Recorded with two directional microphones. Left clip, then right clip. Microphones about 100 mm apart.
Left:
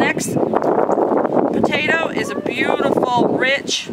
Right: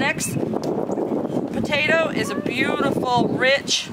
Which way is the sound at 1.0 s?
70° left (ahead or behind).